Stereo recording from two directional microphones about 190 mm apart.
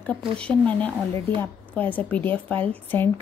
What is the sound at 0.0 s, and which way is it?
Speech, 5° left (ahead or behind).